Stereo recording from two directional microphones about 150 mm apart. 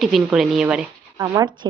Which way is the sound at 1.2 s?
25° right (ahead or behind).